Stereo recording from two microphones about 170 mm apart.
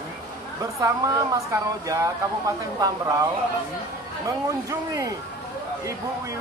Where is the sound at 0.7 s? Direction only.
20° right (ahead or behind).